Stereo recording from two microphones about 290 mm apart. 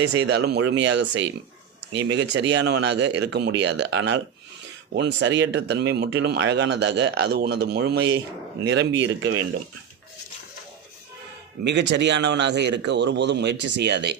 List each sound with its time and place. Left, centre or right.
0.1 s speech: right
11.6 s speech: right